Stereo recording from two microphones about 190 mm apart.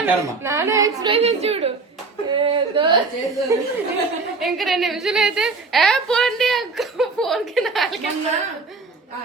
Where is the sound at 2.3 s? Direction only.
25° right (ahead or behind).